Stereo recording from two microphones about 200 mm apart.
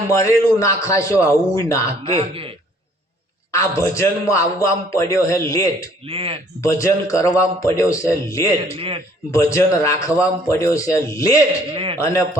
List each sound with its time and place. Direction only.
0.1 s a man's voice: 15° left (ahead or behind)
2.1 s a man's voice: 25° right (ahead or behind)
3.5 s a man's voice: 15° left (ahead or behind)
6.1 s a man's voice: 25° right (ahead or behind)
6.6 s a man's voice: 15° left (ahead or behind)
8.7 s a man's voice: 30° right (ahead or behind)
9.3 s a man's voice: 15° left (ahead or behind)
11.7 s a man's voice: 25° right (ahead or behind)